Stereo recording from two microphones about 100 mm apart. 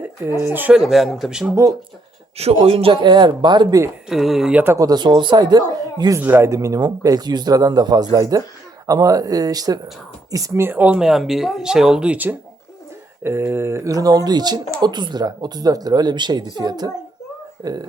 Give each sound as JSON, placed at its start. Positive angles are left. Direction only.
{"t": 0.2, "sound": "speech", "side_deg": -25}
{"t": 0.7, "sound": "speech", "side_deg": -5}
{"t": 2.4, "sound": "speech", "side_deg": -85}
{"t": 4.1, "sound": "speech", "side_deg": -5}
{"t": 4.5, "sound": "speech", "side_deg": -25}
{"t": 4.8, "sound": "speech", "side_deg": -45}
{"t": 6.1, "sound": "speech", "side_deg": -20}
{"t": 6.5, "sound": "a man's voice", "side_deg": -35}
{"t": 11.0, "sound": "a man's voice", "side_deg": 0}